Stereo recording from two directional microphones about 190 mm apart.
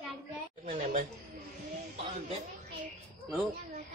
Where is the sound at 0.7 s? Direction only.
40° right (ahead or behind).